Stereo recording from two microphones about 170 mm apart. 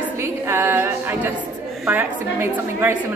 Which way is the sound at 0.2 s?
15° right (ahead or behind).